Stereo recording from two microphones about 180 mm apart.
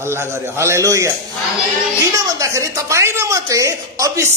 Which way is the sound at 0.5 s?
15° right (ahead or behind).